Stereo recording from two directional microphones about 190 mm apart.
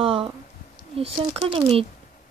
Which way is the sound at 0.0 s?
30° right (ahead or behind).